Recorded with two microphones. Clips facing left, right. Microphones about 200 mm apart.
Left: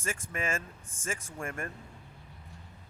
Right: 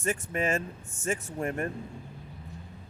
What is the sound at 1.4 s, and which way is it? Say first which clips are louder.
Speech: right 7 dB; 35° right (ahead or behind).